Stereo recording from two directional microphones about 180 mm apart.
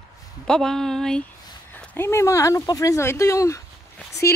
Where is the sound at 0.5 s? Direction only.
5° left (ahead or behind).